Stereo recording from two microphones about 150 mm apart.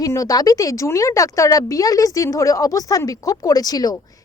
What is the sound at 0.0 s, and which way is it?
Speech, 25° left (ahead or behind).